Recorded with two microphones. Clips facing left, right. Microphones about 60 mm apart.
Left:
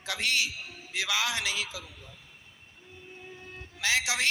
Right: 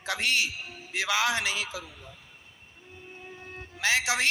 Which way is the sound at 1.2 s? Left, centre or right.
Right.